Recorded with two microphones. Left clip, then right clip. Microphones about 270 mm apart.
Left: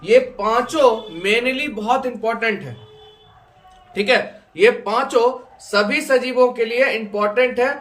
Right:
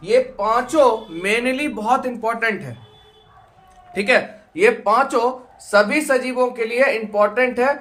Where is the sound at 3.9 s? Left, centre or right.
Centre.